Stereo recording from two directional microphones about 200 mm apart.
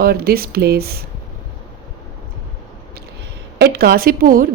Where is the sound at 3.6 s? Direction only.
50° right (ahead or behind).